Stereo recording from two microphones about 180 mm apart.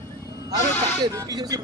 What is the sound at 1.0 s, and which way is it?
Speech, 20° right (ahead or behind).